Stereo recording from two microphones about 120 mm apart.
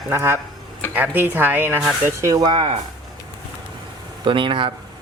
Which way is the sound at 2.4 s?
50° right (ahead or behind).